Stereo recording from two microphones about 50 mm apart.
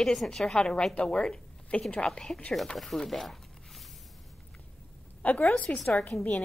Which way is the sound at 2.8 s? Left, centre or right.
Centre.